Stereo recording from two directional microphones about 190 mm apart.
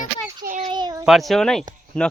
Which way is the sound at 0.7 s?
20° right (ahead or behind).